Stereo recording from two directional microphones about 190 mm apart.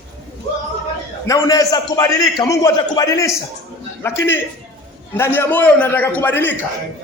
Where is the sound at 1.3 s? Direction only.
20° left (ahead or behind).